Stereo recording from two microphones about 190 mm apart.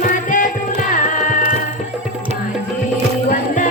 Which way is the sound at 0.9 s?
40° left (ahead or behind).